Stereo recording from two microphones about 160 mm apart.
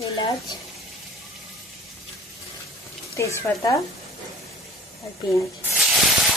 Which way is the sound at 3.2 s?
20° left (ahead or behind).